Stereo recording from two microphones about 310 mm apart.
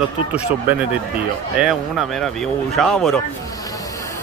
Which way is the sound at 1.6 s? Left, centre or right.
Centre.